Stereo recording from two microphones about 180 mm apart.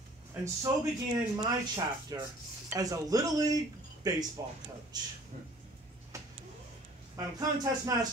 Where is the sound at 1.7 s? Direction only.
20° right (ahead or behind).